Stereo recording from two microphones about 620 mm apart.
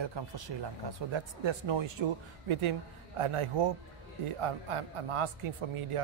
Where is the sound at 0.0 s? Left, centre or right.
Right.